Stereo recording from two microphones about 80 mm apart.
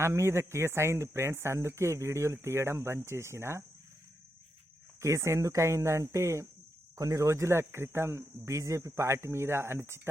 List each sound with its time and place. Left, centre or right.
0.0 s speech: right
4.9 s speech: right